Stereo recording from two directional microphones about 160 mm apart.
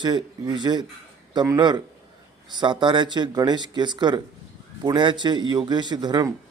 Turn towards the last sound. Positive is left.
turn(degrees=-25)  # may be behind; listen again after turning